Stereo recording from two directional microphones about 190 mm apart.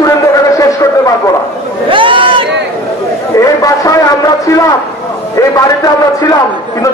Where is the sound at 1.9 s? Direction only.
25° right (ahead or behind).